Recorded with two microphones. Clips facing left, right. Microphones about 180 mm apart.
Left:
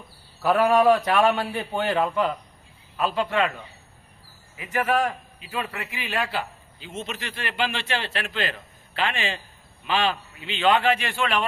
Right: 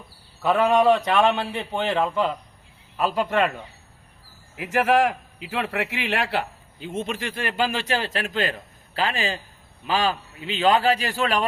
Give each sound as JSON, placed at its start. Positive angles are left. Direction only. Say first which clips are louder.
{"t": 0.4, "sound": "a man's voice", "louder": "even", "side_deg": 5}
{"t": 3.2, "sound": "speech", "louder": "right 2 dB", "side_deg": -45}
{"t": 4.5, "sound": "a man's voice", "louder": "right 4 dB", "side_deg": -85}